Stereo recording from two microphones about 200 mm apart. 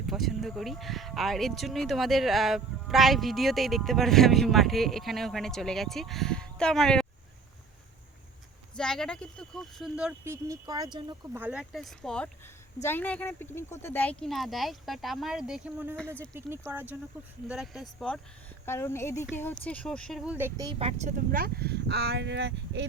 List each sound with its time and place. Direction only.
0.1 s speech: centre (ahead or behind)
8.7 s speech: 5° left (ahead or behind); by 11.0 s 20° right (ahead or behind)
11.3 s speech: 5° right (ahead or behind)
18.6 s speech: 10° left (ahead or behind); by 20.5 s 5° right (ahead or behind)
20.6 s speech: 25° right (ahead or behind)
21.3 s speech: 50° right (ahead or behind)